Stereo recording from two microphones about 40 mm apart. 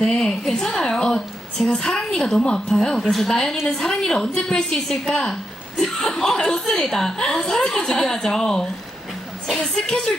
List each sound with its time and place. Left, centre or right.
0.0 s a woman's voice: centre
2.6 s a woman's voice: centre
3.3 s a woman's voice: centre